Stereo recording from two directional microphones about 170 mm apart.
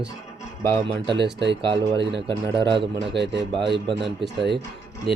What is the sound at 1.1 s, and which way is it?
Speech, 90° right.